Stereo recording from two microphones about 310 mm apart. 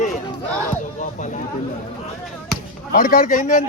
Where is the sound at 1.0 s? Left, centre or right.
Left.